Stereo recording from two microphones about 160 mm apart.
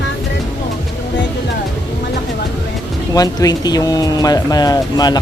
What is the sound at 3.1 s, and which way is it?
Speech, 25° left (ahead or behind).